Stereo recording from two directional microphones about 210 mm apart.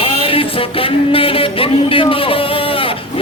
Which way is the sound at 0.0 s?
25° left (ahead or behind).